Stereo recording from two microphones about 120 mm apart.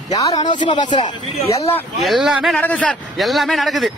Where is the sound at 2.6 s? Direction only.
10° left (ahead or behind).